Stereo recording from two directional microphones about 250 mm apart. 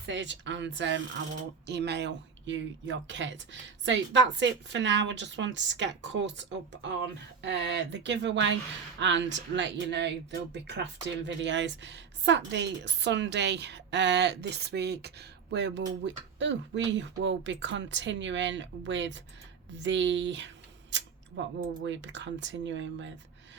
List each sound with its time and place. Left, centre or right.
0.0 s a woman's voice: right